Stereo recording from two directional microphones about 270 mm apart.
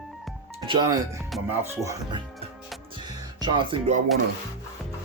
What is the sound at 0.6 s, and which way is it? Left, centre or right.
Speech, centre.